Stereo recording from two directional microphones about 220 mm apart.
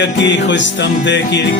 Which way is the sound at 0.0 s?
55° left (ahead or behind).